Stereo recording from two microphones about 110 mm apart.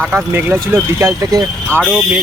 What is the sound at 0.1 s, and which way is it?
Speech, 15° right (ahead or behind).